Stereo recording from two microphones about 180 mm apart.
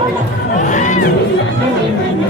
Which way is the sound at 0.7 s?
45° left (ahead or behind).